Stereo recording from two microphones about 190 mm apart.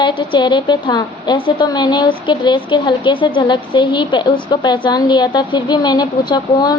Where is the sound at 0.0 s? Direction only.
25° left (ahead or behind).